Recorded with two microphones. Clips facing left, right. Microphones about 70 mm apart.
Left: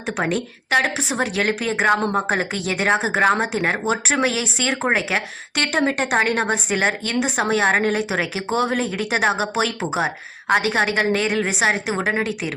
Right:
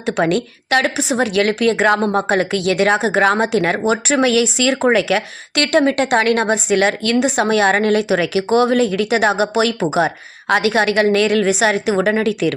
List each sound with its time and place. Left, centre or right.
0.0 s a woman's voice: right
3.2 s speech: right
4.9 s a woman's voice: right
8.5 s speech: right
10.8 s a woman's voice: right